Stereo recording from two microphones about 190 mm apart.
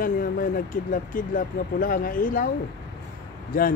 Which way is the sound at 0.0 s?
45° left (ahead or behind).